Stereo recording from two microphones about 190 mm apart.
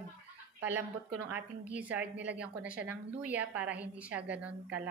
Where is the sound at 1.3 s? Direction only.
10° right (ahead or behind).